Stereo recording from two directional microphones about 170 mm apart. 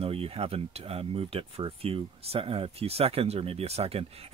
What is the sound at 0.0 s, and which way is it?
Speech, 35° right (ahead or behind).